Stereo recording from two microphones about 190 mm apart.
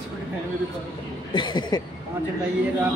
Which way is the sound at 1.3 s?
25° left (ahead or behind).